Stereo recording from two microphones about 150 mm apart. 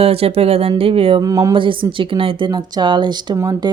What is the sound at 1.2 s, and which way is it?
Speech, 25° right (ahead or behind).